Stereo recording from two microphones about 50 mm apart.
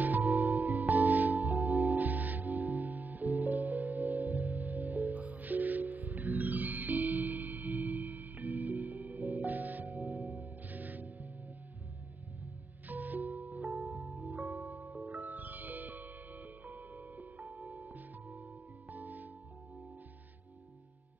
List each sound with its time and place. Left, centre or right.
0.0 s music: right
12.8 s music: right